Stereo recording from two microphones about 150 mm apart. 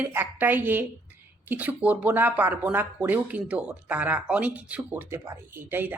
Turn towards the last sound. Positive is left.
turn(degrees=-15)  # may be behind; listen again after turning